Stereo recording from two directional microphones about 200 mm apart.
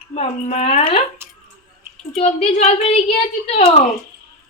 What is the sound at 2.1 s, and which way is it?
Speech, 35° left (ahead or behind).